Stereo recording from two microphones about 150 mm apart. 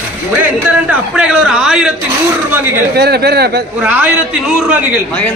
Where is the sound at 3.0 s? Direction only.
90° right.